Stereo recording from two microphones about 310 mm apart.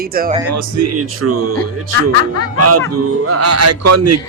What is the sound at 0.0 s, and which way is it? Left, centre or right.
Speech, right.